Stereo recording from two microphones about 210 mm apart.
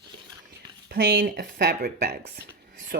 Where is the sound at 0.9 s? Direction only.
45° right (ahead or behind).